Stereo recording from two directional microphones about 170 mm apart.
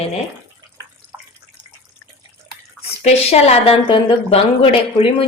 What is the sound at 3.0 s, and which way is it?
A woman's voice, 40° left (ahead or behind).